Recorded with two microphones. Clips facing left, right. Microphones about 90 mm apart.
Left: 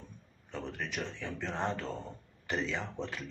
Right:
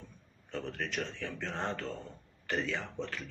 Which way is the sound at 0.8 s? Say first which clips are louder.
Right 1 dB; 10° left (ahead or behind).